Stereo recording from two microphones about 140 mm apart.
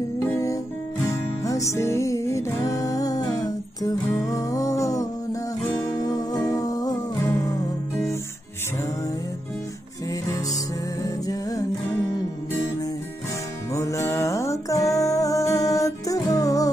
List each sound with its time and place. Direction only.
0.3 s music: 20° left (ahead or behind)
13.7 s music: 20° left (ahead or behind)